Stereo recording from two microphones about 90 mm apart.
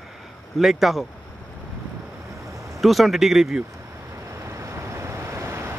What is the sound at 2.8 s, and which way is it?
Speech, centre (ahead or behind).